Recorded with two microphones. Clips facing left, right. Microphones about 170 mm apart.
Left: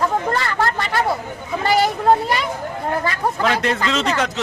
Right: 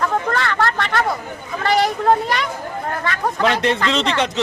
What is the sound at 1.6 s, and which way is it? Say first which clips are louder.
Speech: even; centre (ahead or behind).